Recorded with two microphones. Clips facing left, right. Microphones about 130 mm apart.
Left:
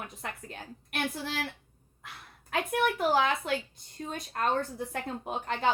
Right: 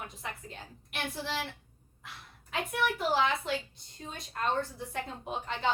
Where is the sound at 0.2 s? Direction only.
55° left (ahead or behind).